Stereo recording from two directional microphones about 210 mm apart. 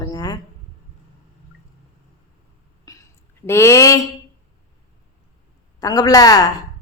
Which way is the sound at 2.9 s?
15° left (ahead or behind).